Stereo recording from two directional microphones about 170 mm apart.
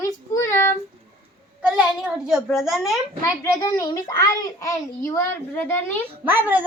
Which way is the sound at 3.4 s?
20° left (ahead or behind).